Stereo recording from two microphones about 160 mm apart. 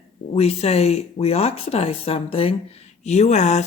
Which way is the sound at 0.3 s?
40° left (ahead or behind).